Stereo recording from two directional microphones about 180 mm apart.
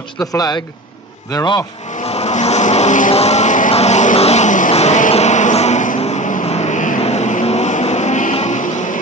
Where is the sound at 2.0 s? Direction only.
35° left (ahead or behind).